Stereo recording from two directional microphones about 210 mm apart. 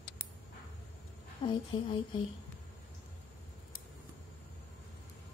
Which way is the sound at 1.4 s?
25° left (ahead or behind).